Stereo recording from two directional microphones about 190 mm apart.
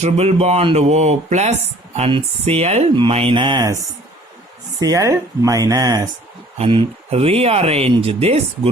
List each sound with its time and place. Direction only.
0.0 s speech: 35° right (ahead or behind)
4.8 s speech: 20° right (ahead or behind)
6.6 s speech: 30° right (ahead or behind)